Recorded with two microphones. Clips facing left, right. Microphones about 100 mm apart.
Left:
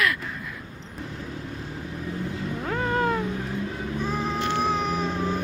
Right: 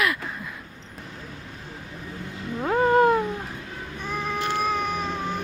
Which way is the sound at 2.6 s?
30° right (ahead or behind).